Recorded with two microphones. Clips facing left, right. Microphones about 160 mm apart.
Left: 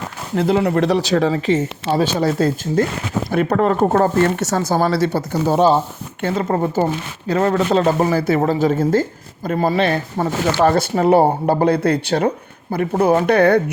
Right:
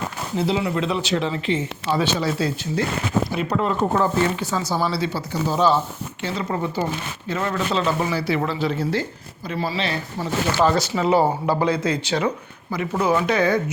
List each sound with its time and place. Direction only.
0.4 s speech: 55° left (ahead or behind); by 1.0 s 75° left (ahead or behind)
1.0 s speech: 40° left (ahead or behind)
4.4 s speech: 70° left (ahead or behind)
4.6 s speech: 50° left (ahead or behind)